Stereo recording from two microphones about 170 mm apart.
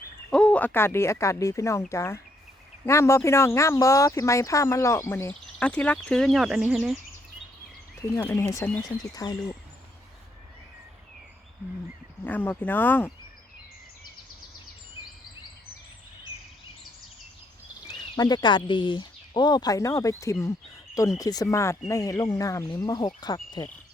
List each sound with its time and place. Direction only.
0.3 s speech: 5° left (ahead or behind)
8.1 s speech: 20° left (ahead or behind)
12.2 s speech: 10° left (ahead or behind)
18.2 s speech: 25° left (ahead or behind)